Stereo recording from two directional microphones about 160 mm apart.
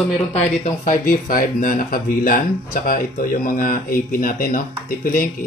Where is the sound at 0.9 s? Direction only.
60° left (ahead or behind).